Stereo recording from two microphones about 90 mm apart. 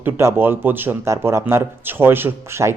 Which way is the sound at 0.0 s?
25° right (ahead or behind).